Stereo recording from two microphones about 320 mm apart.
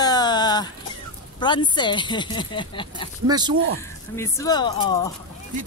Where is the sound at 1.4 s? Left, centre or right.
Centre.